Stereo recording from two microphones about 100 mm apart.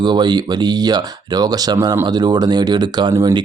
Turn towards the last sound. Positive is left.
turn(degrees=-45)  # may be behind; listen again after turning